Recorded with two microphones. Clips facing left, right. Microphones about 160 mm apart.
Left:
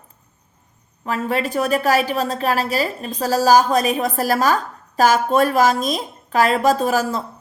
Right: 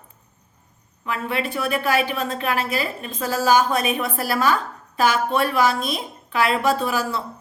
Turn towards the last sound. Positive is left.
turn(degrees=40)  # may be behind; listen again after turning